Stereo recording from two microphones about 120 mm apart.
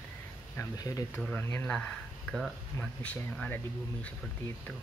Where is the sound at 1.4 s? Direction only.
15° left (ahead or behind).